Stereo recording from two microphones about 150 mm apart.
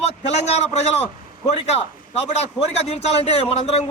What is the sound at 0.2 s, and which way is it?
A man's voice, 45° left (ahead or behind).